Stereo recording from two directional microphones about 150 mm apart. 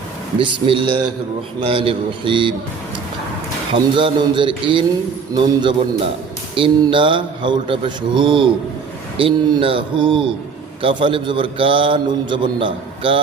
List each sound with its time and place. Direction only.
0.3 s a man's voice: 35° right (ahead or behind)
3.9 s a man's voice: 35° right (ahead or behind)